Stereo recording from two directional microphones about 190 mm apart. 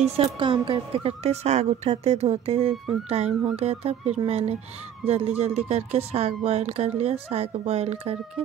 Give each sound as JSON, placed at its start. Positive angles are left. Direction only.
{"t": 0.0, "sound": "a woman's voice", "side_deg": -30}